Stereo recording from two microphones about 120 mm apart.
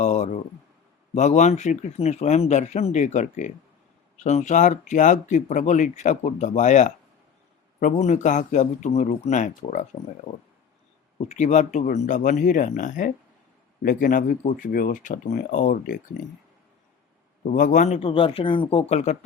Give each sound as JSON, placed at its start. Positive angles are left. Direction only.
{"t": 0.0, "sound": "a sound", "side_deg": 75}
{"t": 1.1, "sound": "speech", "side_deg": 75}
{"t": 11.3, "sound": "speech", "side_deg": 75}
{"t": 14.2, "sound": "speech", "side_deg": 90}
{"t": 17.4, "sound": "speech", "side_deg": 90}
{"t": 18.0, "sound": "speech", "side_deg": 45}